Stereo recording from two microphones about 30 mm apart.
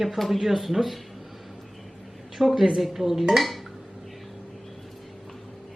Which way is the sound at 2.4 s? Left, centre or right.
Centre.